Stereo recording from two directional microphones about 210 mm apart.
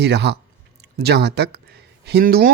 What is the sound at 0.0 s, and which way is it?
Speech, 55° right (ahead or behind).